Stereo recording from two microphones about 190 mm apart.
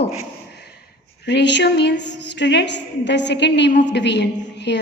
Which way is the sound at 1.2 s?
65° left (ahead or behind).